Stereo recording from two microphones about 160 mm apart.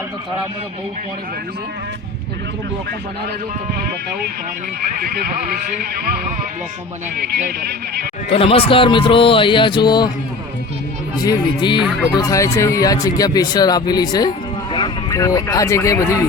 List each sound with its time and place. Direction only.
7.3 s speech: 60° right (ahead or behind)
8.3 s speech: 35° left (ahead or behind)
11.2 s speech: 25° left (ahead or behind)
11.8 s speech: 5° right (ahead or behind)
12.1 s speech: 20° left (ahead or behind)